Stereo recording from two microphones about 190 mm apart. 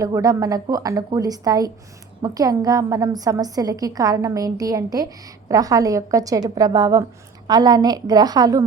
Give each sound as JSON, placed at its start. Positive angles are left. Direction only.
{"t": 0.0, "sound": "a woman's voice", "side_deg": -20}